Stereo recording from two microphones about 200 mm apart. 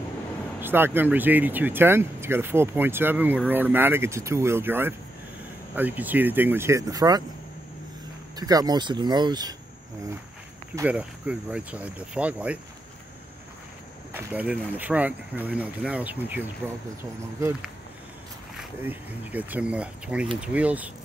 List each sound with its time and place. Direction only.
0.6 s speech: 10° right (ahead or behind)
8.4 s speech: 20° right (ahead or behind)
10.8 s speech: 5° right (ahead or behind)
14.1 s speech: 10° right (ahead or behind)